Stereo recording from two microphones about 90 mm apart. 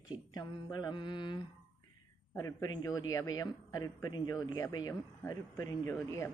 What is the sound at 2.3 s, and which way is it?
Speech, 35° left (ahead or behind).